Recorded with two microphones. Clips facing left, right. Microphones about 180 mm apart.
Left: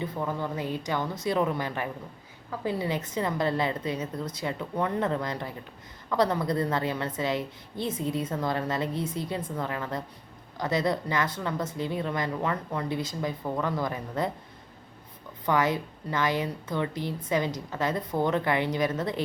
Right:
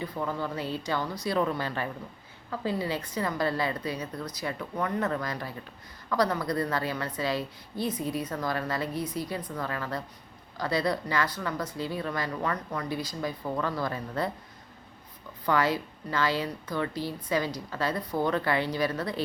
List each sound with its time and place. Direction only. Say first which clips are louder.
0.2 s a woman's voice: right 1 dB; 15° left (ahead or behind)
15.4 s a woman's voice: left 1 dB; 20° left (ahead or behind)